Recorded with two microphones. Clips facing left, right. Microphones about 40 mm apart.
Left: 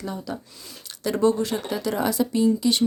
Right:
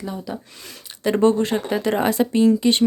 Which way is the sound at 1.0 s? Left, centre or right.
Right.